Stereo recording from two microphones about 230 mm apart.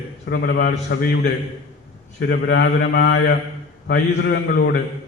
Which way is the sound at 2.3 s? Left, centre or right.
Left.